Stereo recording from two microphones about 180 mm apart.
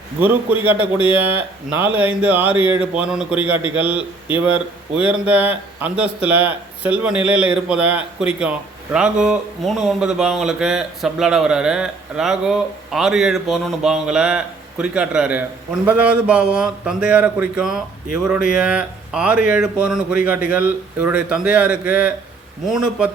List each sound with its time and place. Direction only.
0.2 s a man's voice: 10° right (ahead or behind)